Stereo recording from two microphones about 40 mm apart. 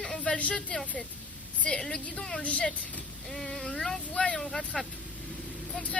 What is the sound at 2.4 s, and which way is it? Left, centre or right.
Speech, left.